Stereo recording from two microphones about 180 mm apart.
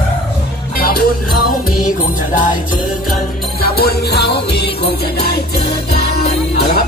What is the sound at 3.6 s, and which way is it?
Music, 60° left (ahead or behind).